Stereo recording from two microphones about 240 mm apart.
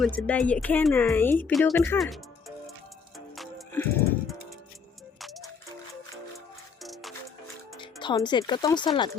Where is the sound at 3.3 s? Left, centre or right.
Centre.